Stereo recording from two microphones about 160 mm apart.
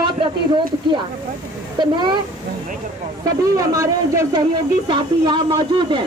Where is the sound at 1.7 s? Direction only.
30° right (ahead or behind).